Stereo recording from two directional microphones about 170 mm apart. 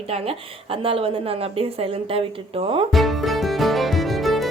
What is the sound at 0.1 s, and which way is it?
Speech, 35° right (ahead or behind).